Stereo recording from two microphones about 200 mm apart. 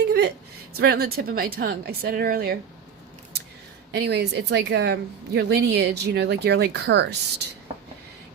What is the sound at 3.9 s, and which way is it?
Speech, 55° right (ahead or behind).